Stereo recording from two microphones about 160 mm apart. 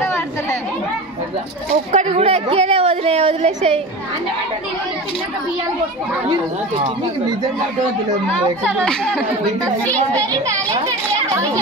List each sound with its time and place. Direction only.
0.0 s chatter: 15° left (ahead or behind)
1.9 s a woman's voice: 45° right (ahead or behind)
8.6 s speech: 5° left (ahead or behind)